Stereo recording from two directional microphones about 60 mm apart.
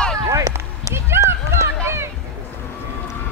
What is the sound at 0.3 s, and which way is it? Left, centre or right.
Run, right.